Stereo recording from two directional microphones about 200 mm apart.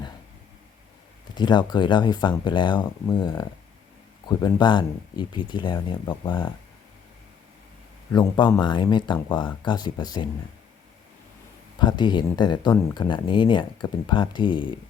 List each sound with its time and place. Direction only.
1.4 s speech: 20° left (ahead or behind)
4.4 s speech: 20° left (ahead or behind)
8.1 s speech: 20° left (ahead or behind)
11.8 s speech: 20° left (ahead or behind)